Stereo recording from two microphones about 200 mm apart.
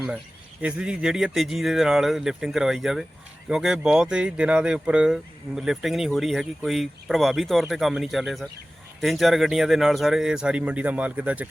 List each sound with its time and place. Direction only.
0.6 s speech: 5° right (ahead or behind)